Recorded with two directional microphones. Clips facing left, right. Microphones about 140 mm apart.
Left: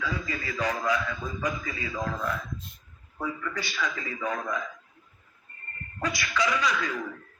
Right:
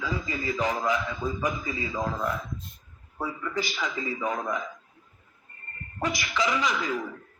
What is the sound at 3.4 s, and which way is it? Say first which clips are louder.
A man's voice: right 2 dB; 25° right (ahead or behind).